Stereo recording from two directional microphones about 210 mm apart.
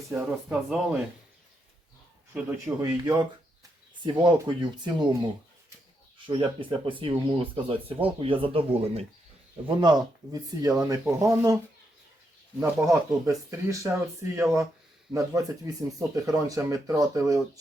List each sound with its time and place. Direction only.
0.1 s speech: 5° right (ahead or behind)
2.3 s speech: 5° right (ahead or behind)
15.1 s speech: 15° right (ahead or behind)